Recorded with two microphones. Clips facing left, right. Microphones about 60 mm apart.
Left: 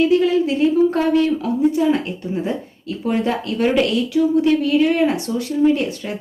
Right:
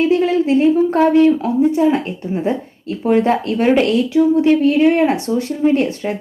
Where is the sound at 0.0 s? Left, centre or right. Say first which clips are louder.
Right 1 dB; right.